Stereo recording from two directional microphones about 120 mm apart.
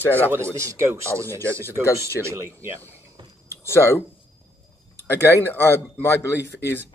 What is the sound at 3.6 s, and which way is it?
Speech, 20° left (ahead or behind).